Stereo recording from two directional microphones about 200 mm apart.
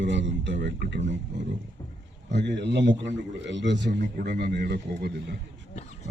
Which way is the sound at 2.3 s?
60° right (ahead or behind).